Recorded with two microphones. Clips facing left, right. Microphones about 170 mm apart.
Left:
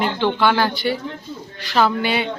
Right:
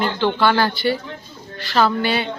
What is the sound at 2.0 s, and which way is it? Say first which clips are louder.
Speech: even; 15° left (ahead or behind).